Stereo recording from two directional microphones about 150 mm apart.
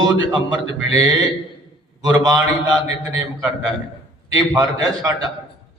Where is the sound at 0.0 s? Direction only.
30° right (ahead or behind).